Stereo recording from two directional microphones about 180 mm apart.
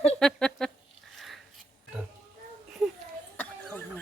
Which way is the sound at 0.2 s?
5° left (ahead or behind).